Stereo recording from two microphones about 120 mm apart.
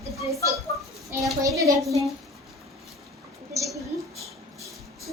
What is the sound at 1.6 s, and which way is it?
Speech, 25° right (ahead or behind).